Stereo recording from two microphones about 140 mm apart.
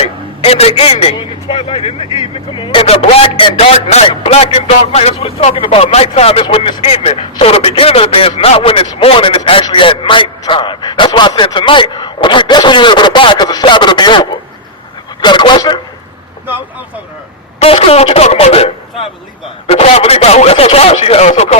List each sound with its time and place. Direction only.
0.0 s a man's voice: 45° left (ahead or behind)
2.8 s a man's voice: 45° left (ahead or behind)
17.6 s speech: 45° left (ahead or behind)